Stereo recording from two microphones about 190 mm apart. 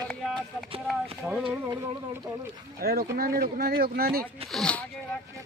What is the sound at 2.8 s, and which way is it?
Speech, 50° right (ahead or behind).